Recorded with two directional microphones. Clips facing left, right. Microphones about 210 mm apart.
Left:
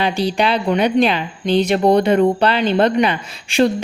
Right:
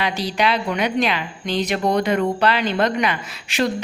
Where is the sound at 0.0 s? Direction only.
30° left (ahead or behind).